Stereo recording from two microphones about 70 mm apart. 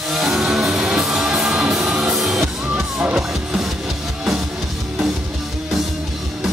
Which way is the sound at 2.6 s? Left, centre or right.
Centre.